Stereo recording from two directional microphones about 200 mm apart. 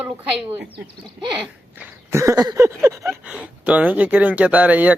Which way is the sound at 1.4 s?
10° right (ahead or behind).